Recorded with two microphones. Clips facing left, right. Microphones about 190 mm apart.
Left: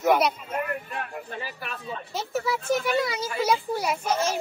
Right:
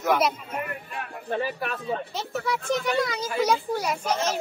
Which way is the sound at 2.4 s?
5° left (ahead or behind).